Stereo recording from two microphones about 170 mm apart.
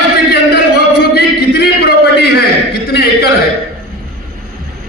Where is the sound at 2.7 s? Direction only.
70° left (ahead or behind).